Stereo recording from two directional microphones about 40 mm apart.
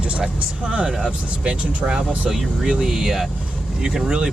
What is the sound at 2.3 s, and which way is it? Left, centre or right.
Speech, centre.